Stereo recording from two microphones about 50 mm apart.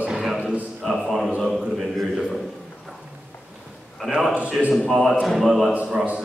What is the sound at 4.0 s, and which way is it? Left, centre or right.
Speech, centre.